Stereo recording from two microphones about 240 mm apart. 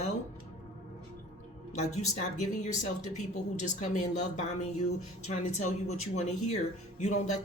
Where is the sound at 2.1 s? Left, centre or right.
Left.